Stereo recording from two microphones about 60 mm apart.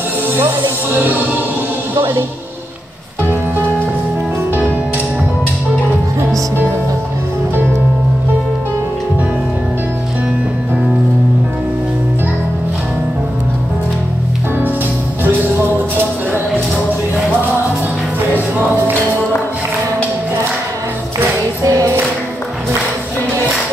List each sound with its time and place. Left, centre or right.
0.4 s speech: right
15.2 s music: right
18.3 s music: right
21.2 s music: right